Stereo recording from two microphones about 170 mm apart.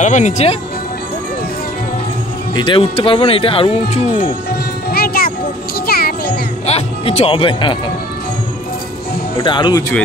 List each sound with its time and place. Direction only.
0.0 s speech: 45° left (ahead or behind)
2.5 s speech: 30° left (ahead or behind)
4.9 s music: 60° left (ahead or behind)
6.6 s music: 40° left (ahead or behind)
9.4 s speech: 25° left (ahead or behind)